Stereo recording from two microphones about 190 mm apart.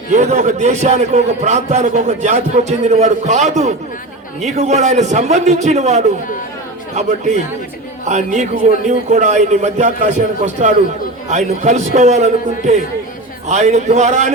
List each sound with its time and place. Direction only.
0.1 s a man's voice: 40° right (ahead or behind)